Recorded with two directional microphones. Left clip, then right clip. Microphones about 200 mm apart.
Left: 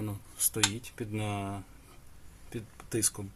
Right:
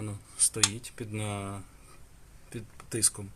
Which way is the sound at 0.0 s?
15° left (ahead or behind).